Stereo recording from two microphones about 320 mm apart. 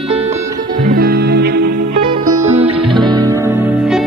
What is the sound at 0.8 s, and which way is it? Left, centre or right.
Music, right.